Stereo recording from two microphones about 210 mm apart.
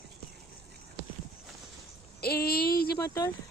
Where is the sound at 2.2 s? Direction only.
50° left (ahead or behind).